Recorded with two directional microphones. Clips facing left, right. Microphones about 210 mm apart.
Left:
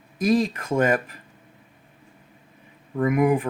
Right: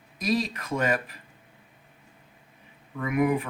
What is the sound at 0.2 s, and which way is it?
Speech, 50° left (ahead or behind).